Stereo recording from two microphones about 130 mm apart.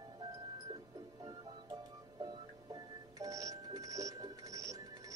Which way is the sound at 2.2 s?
30° right (ahead or behind).